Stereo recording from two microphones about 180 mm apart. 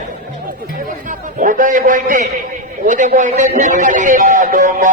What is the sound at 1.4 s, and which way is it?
Speech, 45° right (ahead or behind).